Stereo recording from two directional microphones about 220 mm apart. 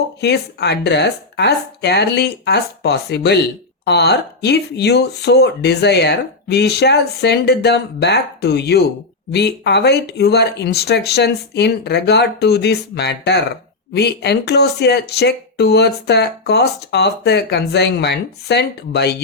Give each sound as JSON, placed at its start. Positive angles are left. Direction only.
{"t": 0.2, "sound": "speech", "side_deg": 50}